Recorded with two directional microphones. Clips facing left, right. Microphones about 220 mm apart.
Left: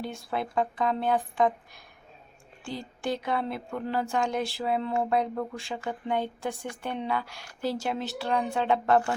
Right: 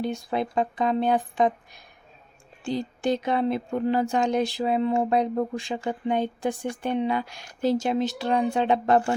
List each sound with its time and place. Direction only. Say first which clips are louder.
0.0 s speech: right 5 dB; 20° right (ahead or behind)